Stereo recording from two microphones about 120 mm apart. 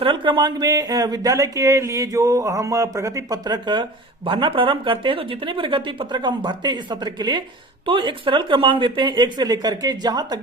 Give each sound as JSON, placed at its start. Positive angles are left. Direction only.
{"t": 0.0, "sound": "speech", "side_deg": -45}